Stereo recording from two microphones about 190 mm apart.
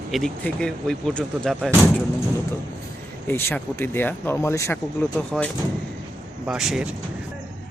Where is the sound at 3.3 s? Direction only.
10° left (ahead or behind).